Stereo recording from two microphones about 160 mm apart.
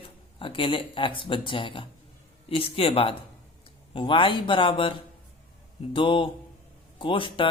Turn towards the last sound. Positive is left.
turn(degrees=30)  # may be behind; listen again after turning